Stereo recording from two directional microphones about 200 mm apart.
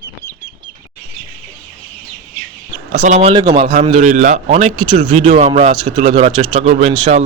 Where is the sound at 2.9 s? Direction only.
35° right (ahead or behind).